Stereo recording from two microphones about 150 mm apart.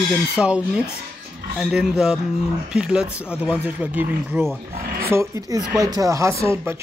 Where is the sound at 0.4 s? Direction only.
5° right (ahead or behind).